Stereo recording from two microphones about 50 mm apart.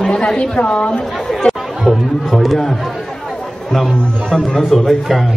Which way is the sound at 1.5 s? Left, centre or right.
Centre.